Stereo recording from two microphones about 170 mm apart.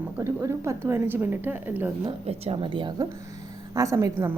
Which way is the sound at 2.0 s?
30° right (ahead or behind).